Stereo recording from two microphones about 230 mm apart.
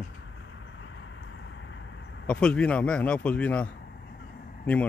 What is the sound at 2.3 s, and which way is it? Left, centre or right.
Speech, centre.